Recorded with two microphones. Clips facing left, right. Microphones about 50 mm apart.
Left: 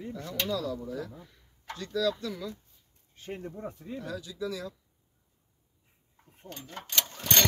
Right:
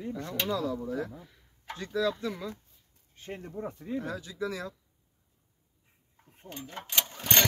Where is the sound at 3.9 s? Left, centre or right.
Right.